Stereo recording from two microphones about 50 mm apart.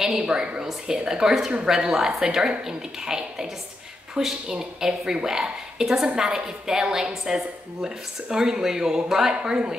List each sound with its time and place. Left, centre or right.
0.0 s a woman's voice: centre